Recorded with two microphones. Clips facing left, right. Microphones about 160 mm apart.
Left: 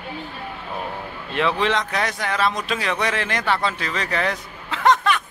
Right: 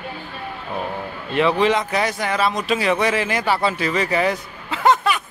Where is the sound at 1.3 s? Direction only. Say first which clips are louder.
Right 4 dB; centre (ahead or behind).